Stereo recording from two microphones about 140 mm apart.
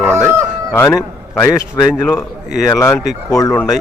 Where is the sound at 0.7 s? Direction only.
15° left (ahead or behind).